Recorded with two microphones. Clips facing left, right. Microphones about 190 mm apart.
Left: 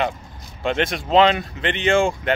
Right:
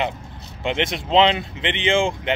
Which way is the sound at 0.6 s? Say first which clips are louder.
Left 2 dB; 20° right (ahead or behind).